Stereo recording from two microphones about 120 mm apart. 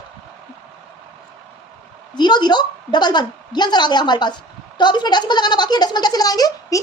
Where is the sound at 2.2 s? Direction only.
35° left (ahead or behind).